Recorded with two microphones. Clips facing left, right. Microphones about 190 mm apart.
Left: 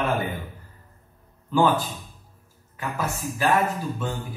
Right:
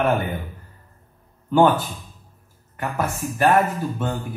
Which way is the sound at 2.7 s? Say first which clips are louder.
Right 4 dB; 60° right (ahead or behind).